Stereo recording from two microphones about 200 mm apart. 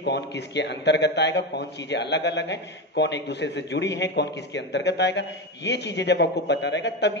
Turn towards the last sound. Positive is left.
turn(degrees=60)  # may be behind; listen again after turning